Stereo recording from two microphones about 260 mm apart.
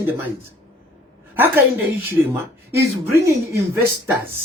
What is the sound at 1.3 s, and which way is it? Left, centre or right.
Speech, centre.